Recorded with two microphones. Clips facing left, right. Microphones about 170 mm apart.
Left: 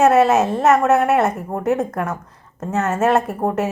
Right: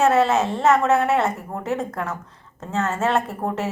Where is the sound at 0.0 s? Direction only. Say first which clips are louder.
Left 4 dB; 20° left (ahead or behind).